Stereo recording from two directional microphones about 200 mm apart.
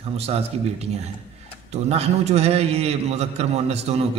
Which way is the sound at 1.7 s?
30° right (ahead or behind).